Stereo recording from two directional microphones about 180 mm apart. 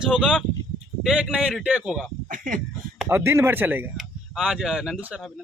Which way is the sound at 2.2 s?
45° right (ahead or behind).